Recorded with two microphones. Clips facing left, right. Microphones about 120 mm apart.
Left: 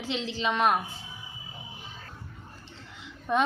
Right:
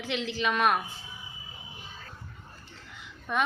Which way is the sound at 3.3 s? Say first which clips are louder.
Left 3 dB; 30° left (ahead or behind).